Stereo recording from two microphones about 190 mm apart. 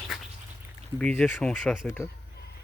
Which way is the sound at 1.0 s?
5° left (ahead or behind).